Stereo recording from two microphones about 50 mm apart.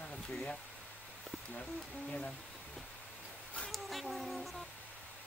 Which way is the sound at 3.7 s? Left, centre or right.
Centre.